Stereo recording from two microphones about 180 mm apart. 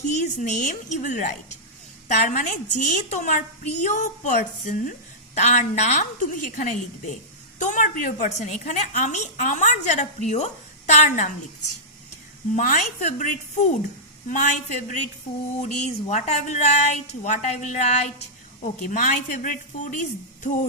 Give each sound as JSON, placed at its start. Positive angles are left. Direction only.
{"t": 0.0, "sound": "a woman's voice", "side_deg": 40}
{"t": 12.5, "sound": "a woman's voice", "side_deg": 45}